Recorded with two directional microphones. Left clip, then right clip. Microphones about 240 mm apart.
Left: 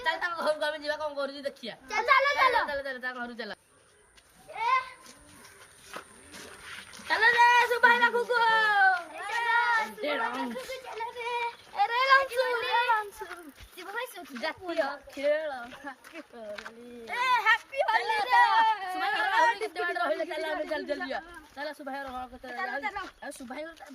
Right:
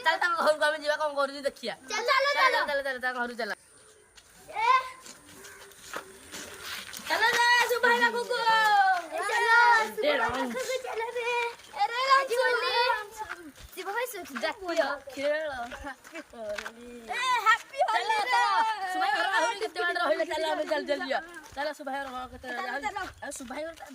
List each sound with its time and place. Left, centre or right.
0.0 s a woman's voice: centre
2.0 s speech: centre
2.6 s a woman's voice: centre
5.9 s wild animals: centre
7.1 s speech: centre
9.0 s children playing: right
11.8 s a sound: centre
12.5 s a sound: right
13.7 s a woman's voice: centre
15.1 s a woman's voice: centre
17.1 s a woman's voice: centre